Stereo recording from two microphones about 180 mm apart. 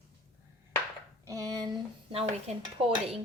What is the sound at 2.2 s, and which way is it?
Dishes, 30° right (ahead or behind).